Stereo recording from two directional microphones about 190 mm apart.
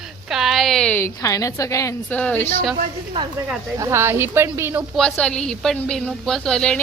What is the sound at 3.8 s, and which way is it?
Speech, 15° right (ahead or behind).